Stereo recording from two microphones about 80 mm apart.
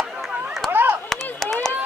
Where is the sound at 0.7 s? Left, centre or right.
Right.